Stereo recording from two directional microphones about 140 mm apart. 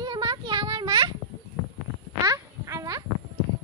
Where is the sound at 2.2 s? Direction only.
25° right (ahead or behind).